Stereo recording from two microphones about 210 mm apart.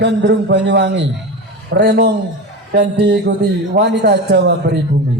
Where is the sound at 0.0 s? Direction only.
55° right (ahead or behind).